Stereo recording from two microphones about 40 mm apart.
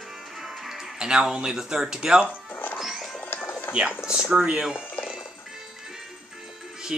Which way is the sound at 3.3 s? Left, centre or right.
Left.